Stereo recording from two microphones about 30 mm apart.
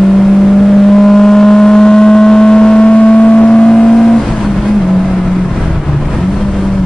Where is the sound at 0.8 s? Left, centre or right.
Centre.